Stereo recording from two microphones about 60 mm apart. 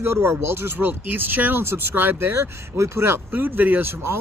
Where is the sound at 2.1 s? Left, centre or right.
Right.